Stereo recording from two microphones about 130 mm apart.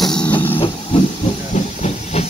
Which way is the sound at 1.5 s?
60° left (ahead or behind).